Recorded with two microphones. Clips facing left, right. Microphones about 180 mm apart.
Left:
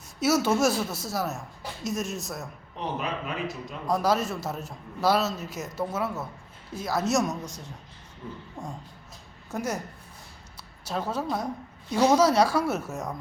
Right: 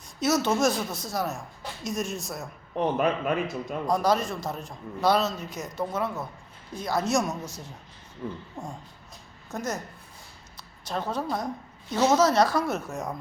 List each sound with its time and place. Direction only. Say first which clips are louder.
0.2 s a man's voice: left 1 dB; 10° left (ahead or behind)
2.7 s a man's voice: right 7 dB; 50° right (ahead or behind)
3.8 s a man's voice: even; 5° left (ahead or behind)